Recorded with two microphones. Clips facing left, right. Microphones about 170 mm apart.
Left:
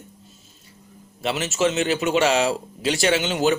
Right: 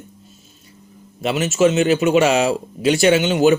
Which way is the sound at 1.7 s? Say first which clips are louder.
Right 6 dB; 15° right (ahead or behind).